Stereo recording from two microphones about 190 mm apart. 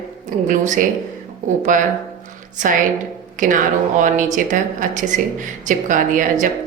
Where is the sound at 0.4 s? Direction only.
40° right (ahead or behind).